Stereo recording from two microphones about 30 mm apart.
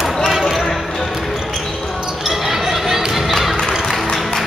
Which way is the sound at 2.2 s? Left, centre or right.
Centre.